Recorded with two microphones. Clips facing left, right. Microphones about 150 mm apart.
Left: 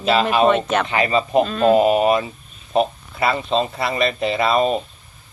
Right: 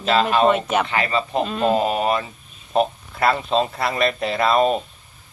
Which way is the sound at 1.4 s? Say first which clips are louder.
Left 5 dB; 15° right (ahead or behind).